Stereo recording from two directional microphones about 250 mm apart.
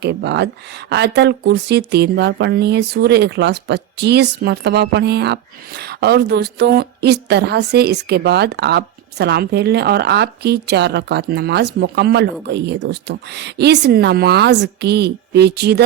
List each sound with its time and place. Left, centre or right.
0.0 s speech: right